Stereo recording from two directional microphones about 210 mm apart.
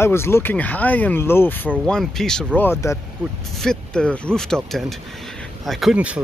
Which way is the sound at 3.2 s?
Centre (ahead or behind).